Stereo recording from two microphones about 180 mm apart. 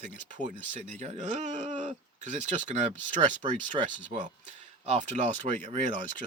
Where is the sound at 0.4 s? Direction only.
40° right (ahead or behind).